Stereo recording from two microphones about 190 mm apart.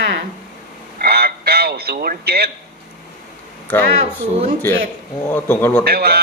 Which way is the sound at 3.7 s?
10° left (ahead or behind).